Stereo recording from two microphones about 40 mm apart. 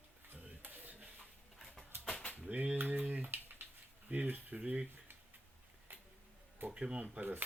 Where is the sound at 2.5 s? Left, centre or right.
Right.